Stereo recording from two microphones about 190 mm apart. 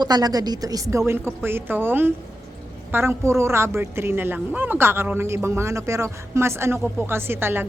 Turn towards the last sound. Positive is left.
turn(degrees=-10)  # may be behind; listen again after turning